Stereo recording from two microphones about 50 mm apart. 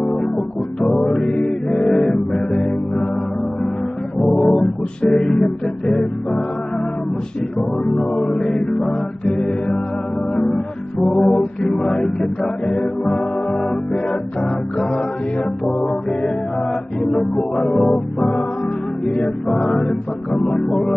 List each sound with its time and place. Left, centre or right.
0.7 s music: centre
4.2 s music: centre
7.8 s music: centre
17.4 s music: centre
19.5 s music: centre